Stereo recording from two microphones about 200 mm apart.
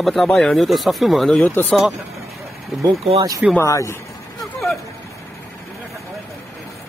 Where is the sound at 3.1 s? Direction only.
20° right (ahead or behind).